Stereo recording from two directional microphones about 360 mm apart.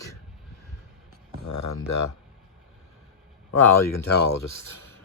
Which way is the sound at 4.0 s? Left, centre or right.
Left.